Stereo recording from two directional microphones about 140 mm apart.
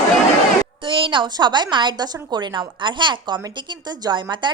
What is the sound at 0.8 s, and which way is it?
A woman's voice, 35° right (ahead or behind).